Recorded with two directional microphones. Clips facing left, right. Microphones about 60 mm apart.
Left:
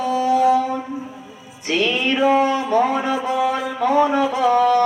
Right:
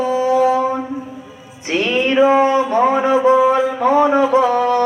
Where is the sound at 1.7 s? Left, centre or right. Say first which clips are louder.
Right 3 dB; right.